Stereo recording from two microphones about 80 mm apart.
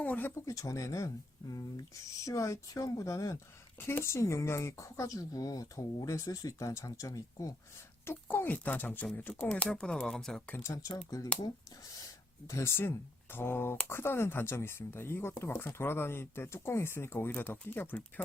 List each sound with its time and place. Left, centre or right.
0.0 s speech: left
0.4 s speech: left
3.8 s speech: left
8.0 s speech: left; by 10.5 s centre
10.5 s speech: left
11.9 s a sound: left
13.3 s speech: left